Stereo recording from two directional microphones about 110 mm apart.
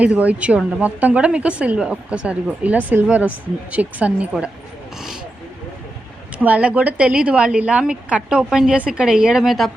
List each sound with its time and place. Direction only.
0.0 s a woman's voice: 10° right (ahead or behind)
6.4 s a woman's voice: 10° right (ahead or behind)